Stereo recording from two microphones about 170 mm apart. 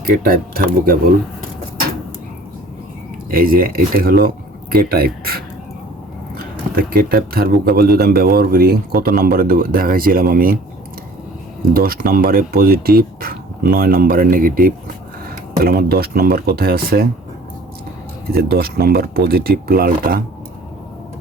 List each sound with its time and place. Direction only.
0.0 s speech: 60° right (ahead or behind)
3.2 s speech: 55° right (ahead or behind)
11.7 s speech: 60° right (ahead or behind)
18.3 s speech: 65° right (ahead or behind)